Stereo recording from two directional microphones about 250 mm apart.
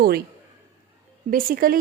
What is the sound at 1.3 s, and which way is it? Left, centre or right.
Speech, right.